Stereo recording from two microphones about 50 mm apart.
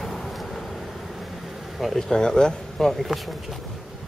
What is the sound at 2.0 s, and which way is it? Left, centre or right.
Speech, centre.